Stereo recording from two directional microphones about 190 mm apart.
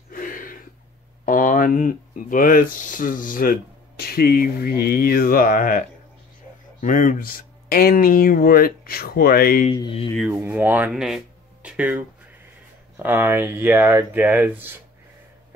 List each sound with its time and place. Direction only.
0.1 s a sound: 45° left (ahead or behind)
1.2 s speech: 45° left (ahead or behind)
6.8 s speech: 45° left (ahead or behind)
9.7 s speech: 30° left (ahead or behind)
10.3 s speech: 10° right (ahead or behind)
13.0 s speech: 10° right (ahead or behind)